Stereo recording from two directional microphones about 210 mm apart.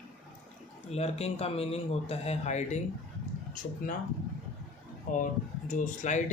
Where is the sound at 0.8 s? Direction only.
30° left (ahead or behind).